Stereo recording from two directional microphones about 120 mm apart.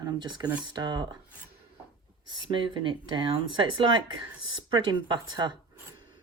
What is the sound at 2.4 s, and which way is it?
Speech, 45° right (ahead or behind).